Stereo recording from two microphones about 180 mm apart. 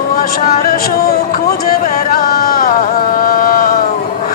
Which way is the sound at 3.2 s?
55° left (ahead or behind).